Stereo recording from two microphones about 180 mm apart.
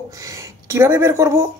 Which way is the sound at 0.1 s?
20° right (ahead or behind).